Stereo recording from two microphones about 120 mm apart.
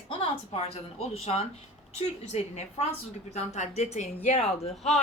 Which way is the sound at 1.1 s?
60° left (ahead or behind).